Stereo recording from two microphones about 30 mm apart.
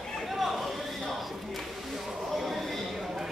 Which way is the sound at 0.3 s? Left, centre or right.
Centre.